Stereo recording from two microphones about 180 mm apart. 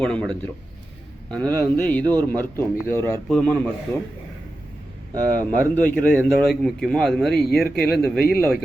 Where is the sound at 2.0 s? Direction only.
20° right (ahead or behind).